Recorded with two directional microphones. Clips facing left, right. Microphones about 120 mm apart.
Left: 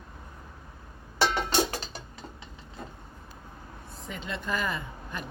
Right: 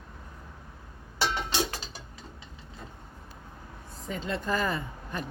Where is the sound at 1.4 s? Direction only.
50° left (ahead or behind).